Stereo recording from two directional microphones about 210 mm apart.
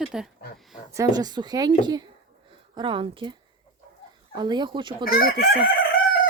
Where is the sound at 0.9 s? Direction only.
15° right (ahead or behind).